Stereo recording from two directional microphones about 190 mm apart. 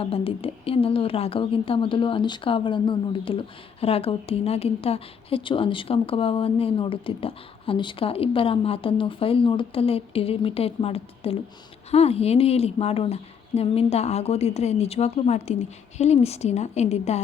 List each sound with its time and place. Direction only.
0.0 s a woman's voice: 30° left (ahead or behind)